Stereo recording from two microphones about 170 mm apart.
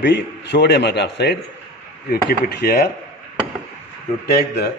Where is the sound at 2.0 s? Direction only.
65° left (ahead or behind).